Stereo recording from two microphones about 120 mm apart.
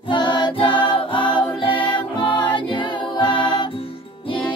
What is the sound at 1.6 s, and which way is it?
Music, 45° left (ahead or behind).